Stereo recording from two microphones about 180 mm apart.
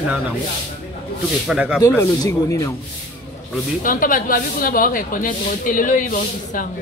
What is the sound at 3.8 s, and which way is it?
A woman's voice, 50° left (ahead or behind).